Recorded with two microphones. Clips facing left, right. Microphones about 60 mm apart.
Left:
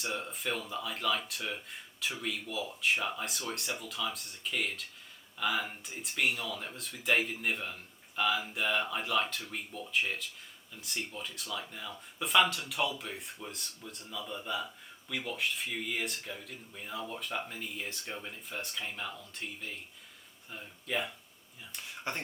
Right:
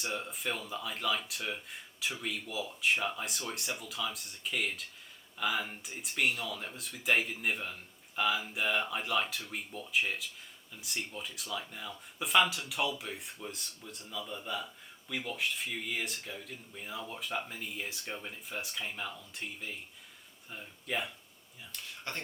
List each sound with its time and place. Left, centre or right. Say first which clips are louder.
0.0 s speech: even; centre
21.7 s speech: left 3 dB; centre